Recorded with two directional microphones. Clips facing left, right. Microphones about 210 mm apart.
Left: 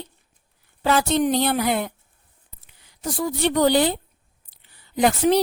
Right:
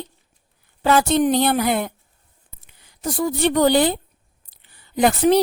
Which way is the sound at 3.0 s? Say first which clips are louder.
Right 3 dB; 50° right (ahead or behind).